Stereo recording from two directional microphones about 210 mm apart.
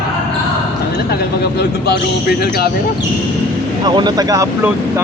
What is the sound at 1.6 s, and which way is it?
Speech, 50° left (ahead or behind).